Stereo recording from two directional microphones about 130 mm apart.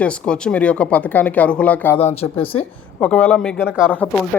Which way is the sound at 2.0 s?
50° left (ahead or behind).